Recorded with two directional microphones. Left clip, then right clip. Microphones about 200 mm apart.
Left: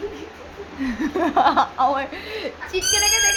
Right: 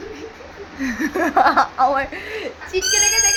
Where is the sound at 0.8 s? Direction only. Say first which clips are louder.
Right 2 dB; 5° right (ahead or behind).